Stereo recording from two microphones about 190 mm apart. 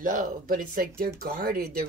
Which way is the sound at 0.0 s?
45° right (ahead or behind).